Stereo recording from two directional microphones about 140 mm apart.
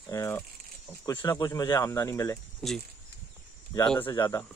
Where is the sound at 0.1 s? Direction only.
20° left (ahead or behind).